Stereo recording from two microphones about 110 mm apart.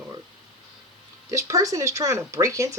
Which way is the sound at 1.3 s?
30° right (ahead or behind).